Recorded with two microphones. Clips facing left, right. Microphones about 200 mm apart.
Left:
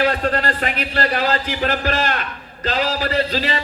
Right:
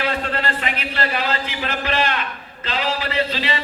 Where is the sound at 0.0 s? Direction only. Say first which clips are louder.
Left 4 dB; 45° left (ahead or behind).